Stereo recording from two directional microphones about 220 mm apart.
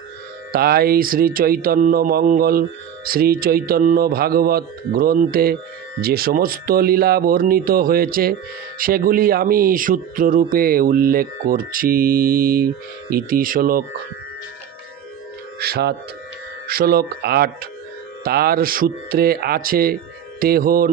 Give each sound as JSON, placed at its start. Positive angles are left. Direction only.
{"t": 0.5, "sound": "speech", "side_deg": -45}
{"t": 15.5, "sound": "speech", "side_deg": -45}